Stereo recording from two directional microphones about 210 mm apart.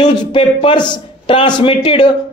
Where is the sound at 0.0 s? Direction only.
20° left (ahead or behind).